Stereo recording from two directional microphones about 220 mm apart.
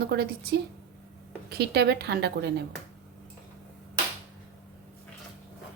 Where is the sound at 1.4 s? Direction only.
50° right (ahead or behind).